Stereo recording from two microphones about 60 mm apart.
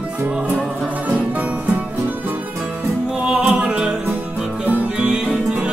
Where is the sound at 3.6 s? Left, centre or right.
Centre.